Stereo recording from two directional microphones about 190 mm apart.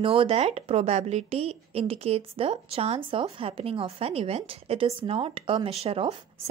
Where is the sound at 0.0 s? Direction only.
30° right (ahead or behind).